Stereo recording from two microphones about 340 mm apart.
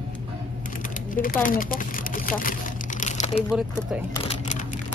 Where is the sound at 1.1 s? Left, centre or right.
Left.